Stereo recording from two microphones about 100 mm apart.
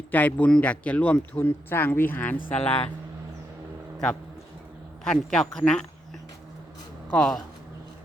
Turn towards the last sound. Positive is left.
turn(degrees=5)  # may be behind; listen again after turning